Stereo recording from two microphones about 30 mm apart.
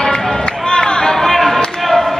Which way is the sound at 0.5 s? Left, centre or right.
Left.